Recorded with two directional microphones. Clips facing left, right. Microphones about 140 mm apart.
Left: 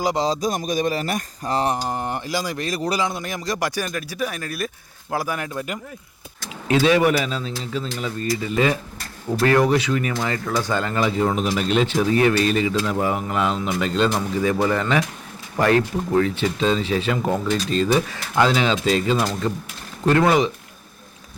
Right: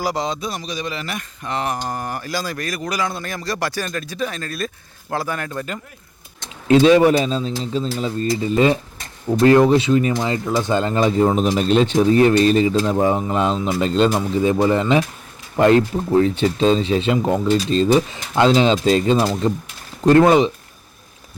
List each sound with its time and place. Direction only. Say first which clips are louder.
0.0 s speech: left 1 dB; 20° left (ahead or behind)
0.3 s speech: left 4 dB; 45° left (ahead or behind)
1.9 s speech: left 1 dB; 20° left (ahead or behind)
3.1 s speech: even; 15° left (ahead or behind)
6.7 s speech: right 5 dB; 30° right (ahead or behind)
14.1 s speech: right 3 dB; 20° right (ahead or behind)